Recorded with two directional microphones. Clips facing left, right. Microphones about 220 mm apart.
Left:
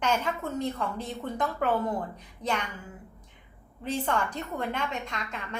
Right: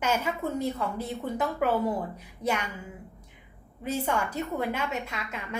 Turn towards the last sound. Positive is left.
turn(degrees=-5)  # may be behind; listen again after turning